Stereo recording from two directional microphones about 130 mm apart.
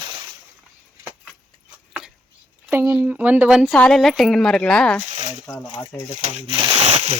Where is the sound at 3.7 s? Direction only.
5° left (ahead or behind).